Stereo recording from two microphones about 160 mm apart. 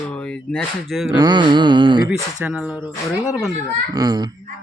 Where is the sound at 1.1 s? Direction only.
25° right (ahead or behind).